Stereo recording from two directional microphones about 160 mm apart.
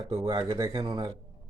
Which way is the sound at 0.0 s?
25° right (ahead or behind).